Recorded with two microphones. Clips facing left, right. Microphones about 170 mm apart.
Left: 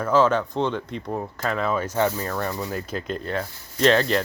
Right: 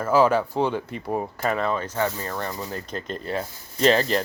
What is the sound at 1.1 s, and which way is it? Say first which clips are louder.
Speech: right 3 dB; 15° right (ahead or behind).